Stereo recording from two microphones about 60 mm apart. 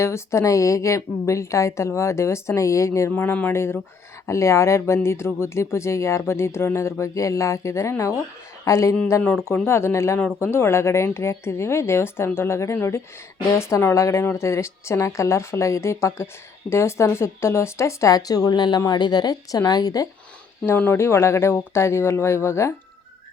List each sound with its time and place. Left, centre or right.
0.0 s a woman's voice: left
3.1 s speech: left
3.5 s a woman's voice: left
7.0 s a woman's voice: left
9.6 s a woman's voice: left
18.1 s speech: left
20.7 s a woman's voice: left